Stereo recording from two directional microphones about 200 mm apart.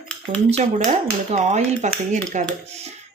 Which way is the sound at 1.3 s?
35° right (ahead or behind).